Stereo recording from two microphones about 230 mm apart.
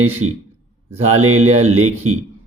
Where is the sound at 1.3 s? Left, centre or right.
Right.